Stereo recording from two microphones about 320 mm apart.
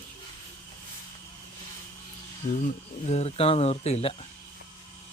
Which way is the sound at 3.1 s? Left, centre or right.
Centre.